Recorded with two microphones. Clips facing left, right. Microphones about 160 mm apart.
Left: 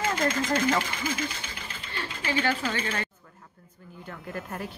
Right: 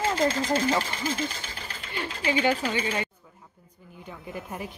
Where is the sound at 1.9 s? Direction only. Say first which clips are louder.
Right 3 dB; 15° right (ahead or behind).